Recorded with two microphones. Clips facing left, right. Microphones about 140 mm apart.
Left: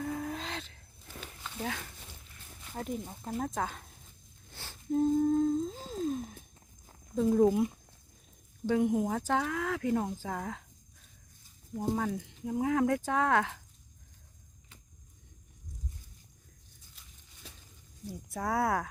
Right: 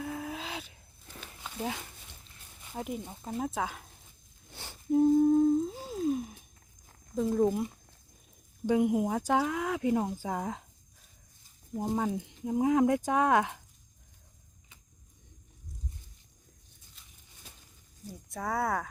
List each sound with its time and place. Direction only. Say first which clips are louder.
0.0 s a sound: left 1 dB; 5° right (ahead or behind)
2.7 s speech: even; 5° right (ahead or behind)
4.5 s humming: right 4 dB; 15° right (ahead or behind)
7.2 s speech: left 2 dB; centre (ahead or behind)
8.6 s speech: right 2 dB; 15° right (ahead or behind)
11.8 s speech: right 1 dB; 20° right (ahead or behind)
18.3 s speech: left 1 dB; centre (ahead or behind)